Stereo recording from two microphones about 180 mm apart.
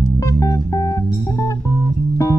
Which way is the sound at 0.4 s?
20° left (ahead or behind).